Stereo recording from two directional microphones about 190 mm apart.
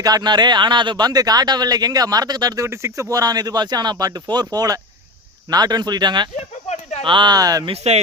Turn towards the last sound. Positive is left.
turn(degrees=-35)  # may be behind; listen again after turning